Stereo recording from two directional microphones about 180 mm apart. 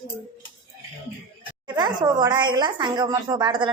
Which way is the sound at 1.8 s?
25° right (ahead or behind).